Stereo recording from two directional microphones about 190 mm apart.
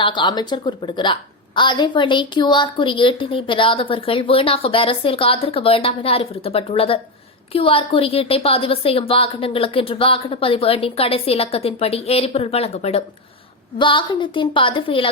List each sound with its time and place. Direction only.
0.0 s a woman's voice: 25° left (ahead or behind)